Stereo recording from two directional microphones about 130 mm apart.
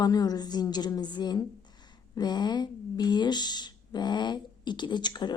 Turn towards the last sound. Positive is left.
turn(degrees=35)  # may be behind; listen again after turning